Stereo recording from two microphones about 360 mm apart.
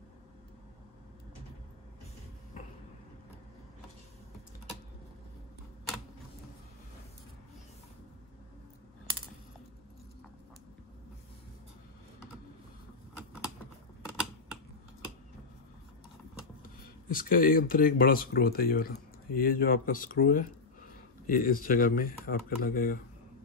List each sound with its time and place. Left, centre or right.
17.1 s speech: left